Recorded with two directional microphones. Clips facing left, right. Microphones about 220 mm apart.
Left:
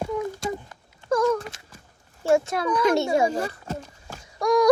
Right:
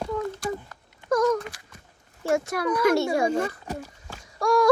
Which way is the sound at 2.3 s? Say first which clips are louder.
Left 3 dB; 25° left (ahead or behind).